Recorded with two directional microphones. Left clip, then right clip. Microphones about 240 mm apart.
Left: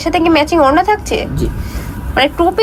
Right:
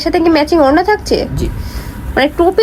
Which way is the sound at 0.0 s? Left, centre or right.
Centre.